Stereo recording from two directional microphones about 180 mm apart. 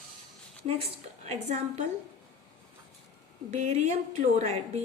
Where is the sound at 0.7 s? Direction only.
35° right (ahead or behind).